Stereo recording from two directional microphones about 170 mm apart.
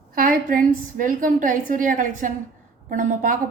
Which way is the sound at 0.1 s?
55° right (ahead or behind).